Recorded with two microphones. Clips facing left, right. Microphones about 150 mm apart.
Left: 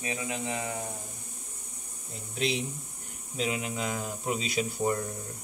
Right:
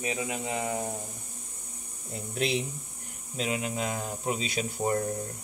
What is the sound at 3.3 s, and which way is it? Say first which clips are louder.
Speech: right 1 dB; 40° right (ahead or behind).